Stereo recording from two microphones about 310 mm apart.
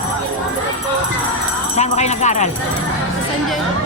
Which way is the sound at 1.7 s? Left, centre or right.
Left.